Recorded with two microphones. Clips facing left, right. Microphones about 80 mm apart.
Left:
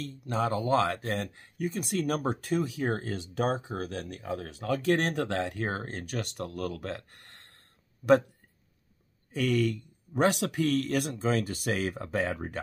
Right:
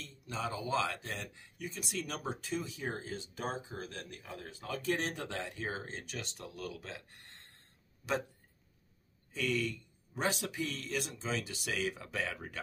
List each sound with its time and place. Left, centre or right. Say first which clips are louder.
0.0 s speech: left 9 dB; left
9.3 s speech: left 8 dB; left